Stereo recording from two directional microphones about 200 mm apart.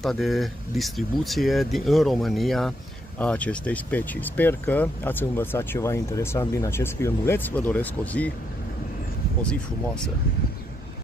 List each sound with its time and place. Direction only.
0.0 s speech: centre (ahead or behind)